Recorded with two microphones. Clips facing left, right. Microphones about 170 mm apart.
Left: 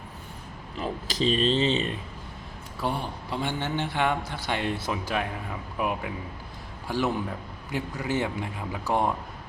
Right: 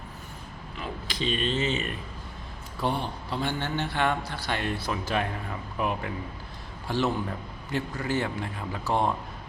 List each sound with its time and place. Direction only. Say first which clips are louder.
0.8 s speech: left 5 dB; 40° left (ahead or behind)
2.8 s a man's voice: right 1 dB; 10° left (ahead or behind)